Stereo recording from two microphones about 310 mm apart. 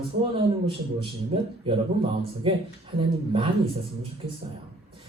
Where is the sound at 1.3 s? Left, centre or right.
Centre.